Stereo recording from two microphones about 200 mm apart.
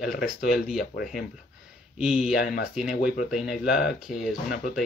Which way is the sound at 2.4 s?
50° left (ahead or behind).